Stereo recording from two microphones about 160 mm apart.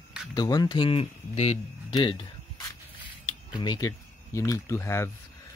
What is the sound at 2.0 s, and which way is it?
Speech, 30° left (ahead or behind).